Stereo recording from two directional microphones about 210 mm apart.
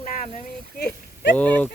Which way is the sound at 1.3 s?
5° left (ahead or behind).